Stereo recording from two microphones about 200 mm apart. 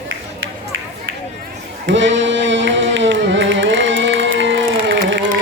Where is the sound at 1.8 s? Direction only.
65° right (ahead or behind).